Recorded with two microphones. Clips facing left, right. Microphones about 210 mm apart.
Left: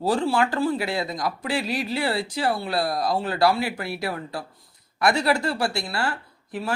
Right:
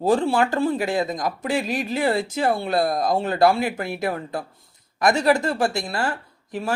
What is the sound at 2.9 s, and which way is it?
Speech, 45° right (ahead or behind).